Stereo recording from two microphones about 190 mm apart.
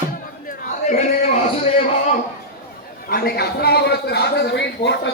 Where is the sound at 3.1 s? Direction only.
55° left (ahead or behind).